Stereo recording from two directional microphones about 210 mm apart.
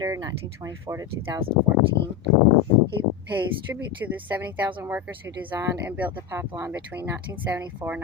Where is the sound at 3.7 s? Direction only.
10° right (ahead or behind).